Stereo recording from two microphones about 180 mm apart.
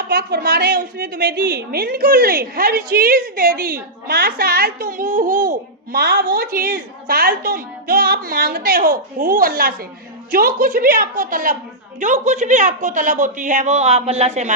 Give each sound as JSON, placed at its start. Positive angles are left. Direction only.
{"t": 0.1, "sound": "a woman's voice", "side_deg": -65}